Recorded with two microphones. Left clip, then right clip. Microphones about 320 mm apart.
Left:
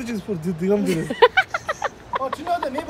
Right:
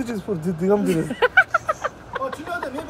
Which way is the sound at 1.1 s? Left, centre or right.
Left.